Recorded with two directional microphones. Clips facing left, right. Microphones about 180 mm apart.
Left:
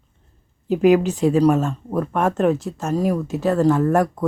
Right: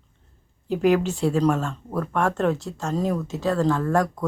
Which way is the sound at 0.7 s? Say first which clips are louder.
Left 5 dB; 15° left (ahead or behind).